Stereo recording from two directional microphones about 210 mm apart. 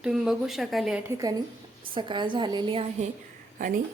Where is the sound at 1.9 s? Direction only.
20° right (ahead or behind).